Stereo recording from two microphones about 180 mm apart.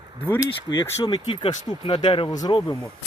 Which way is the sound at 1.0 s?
25° left (ahead or behind).